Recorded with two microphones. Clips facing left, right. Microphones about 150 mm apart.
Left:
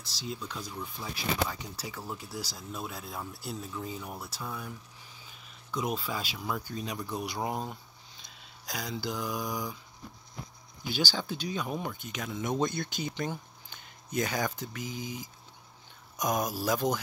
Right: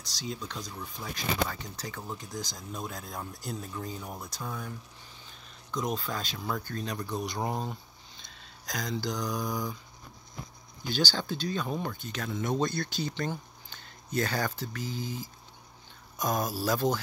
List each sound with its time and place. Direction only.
0.0 s speech: 5° left (ahead or behind)
10.8 s speech: 10° left (ahead or behind)